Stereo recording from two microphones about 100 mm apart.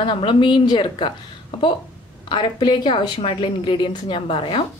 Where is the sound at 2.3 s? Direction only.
50° left (ahead or behind).